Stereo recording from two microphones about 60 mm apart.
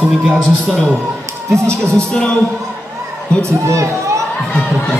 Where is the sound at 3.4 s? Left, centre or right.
Right.